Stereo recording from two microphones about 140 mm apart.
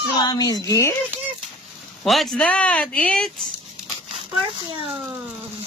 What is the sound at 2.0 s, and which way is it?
Speech, centre (ahead or behind).